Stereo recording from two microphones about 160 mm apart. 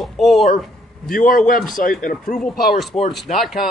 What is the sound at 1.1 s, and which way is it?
Speech, 60° left (ahead or behind).